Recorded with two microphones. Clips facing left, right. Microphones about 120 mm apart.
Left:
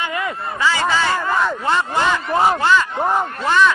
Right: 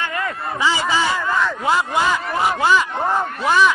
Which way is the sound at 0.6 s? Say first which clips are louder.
Left 1 dB; 15° right (ahead or behind).